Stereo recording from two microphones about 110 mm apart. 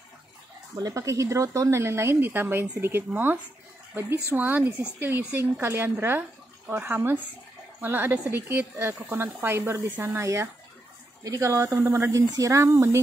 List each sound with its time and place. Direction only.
0.7 s speech: 30° right (ahead or behind)